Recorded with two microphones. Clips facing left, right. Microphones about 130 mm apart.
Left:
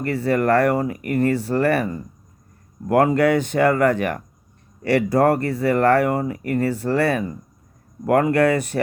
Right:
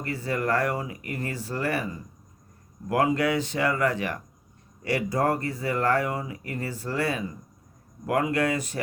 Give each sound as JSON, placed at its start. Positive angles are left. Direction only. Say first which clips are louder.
{"t": 0.0, "sound": "speech", "louder": "left 9 dB", "side_deg": 65}